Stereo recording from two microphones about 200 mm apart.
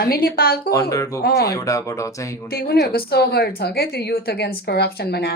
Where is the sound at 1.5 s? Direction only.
15° left (ahead or behind).